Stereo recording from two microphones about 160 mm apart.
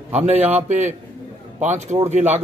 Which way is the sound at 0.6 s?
45° right (ahead or behind).